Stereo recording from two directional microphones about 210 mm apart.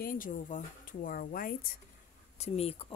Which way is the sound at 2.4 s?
30° left (ahead or behind).